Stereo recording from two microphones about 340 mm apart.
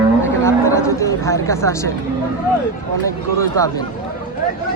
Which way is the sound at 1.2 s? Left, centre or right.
Centre.